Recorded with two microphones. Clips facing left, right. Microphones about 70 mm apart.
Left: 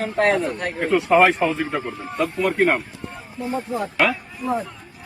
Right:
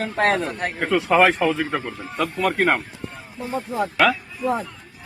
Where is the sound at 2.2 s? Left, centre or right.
Right.